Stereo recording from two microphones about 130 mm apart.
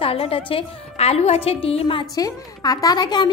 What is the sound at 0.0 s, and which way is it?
A woman's voice, 45° left (ahead or behind).